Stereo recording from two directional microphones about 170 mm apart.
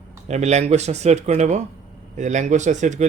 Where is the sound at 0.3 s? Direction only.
40° right (ahead or behind).